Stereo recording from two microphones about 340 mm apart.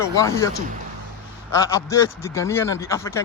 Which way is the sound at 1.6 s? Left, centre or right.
Centre.